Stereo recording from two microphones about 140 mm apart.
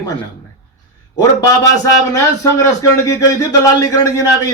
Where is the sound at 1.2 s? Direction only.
25° left (ahead or behind).